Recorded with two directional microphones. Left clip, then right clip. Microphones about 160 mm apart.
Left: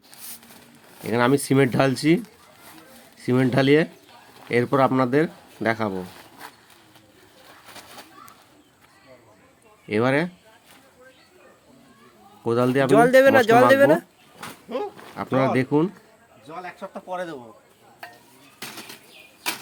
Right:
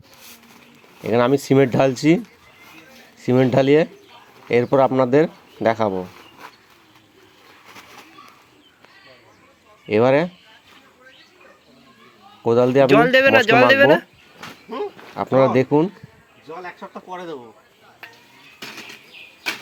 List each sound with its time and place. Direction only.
1.0 s speech: 20° right (ahead or behind)
9.9 s speech: 20° right (ahead or behind)
12.5 s speech: 20° right (ahead or behind)
12.9 s speech: 15° left (ahead or behind)
15.1 s speech: 20° right (ahead or behind)